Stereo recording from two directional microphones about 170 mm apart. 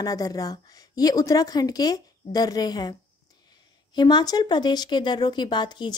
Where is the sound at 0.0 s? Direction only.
20° left (ahead or behind).